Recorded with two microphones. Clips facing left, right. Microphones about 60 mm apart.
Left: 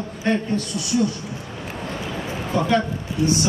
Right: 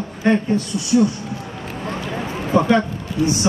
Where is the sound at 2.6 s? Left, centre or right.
Right.